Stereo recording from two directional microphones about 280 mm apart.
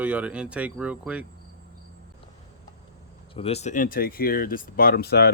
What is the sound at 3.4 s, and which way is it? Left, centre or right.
Speech, left.